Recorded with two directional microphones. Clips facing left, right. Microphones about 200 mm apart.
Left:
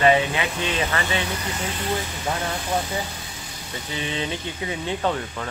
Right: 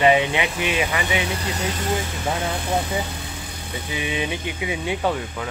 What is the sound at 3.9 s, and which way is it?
Speech, 15° right (ahead or behind).